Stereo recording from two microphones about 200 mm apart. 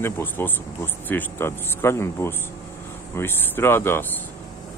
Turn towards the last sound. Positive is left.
turn(degrees=10)  # may be behind; listen again after turning